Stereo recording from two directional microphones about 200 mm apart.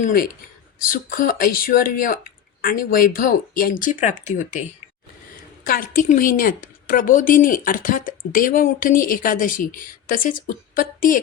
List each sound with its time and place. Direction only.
0.0 s a woman's voice: 45° left (ahead or behind)
5.6 s a woman's voice: 45° left (ahead or behind)